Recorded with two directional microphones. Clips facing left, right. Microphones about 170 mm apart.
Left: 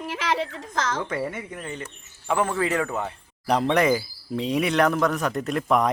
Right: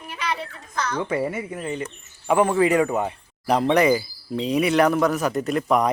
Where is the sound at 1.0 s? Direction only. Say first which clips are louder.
Right 4 dB; 10° right (ahead or behind).